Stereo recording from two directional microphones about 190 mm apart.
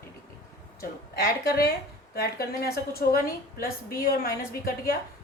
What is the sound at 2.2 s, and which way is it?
A woman's voice, 55° left (ahead or behind).